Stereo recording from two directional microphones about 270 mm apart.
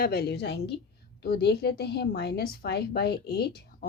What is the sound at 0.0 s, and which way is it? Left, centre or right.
A woman's voice, left.